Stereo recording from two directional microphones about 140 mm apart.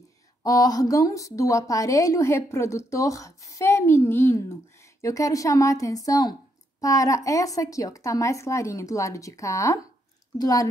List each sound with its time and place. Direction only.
0.4 s a woman's voice: 25° left (ahead or behind)